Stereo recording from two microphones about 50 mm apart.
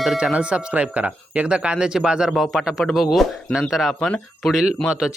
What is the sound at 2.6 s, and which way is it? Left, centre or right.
Speech, centre.